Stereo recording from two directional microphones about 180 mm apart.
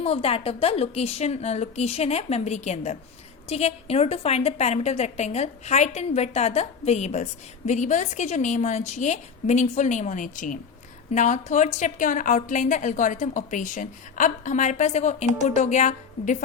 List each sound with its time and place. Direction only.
0.0 s a woman's voice: 35° left (ahead or behind)